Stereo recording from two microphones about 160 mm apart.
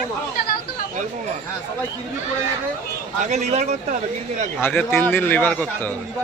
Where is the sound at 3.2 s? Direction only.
45° right (ahead or behind).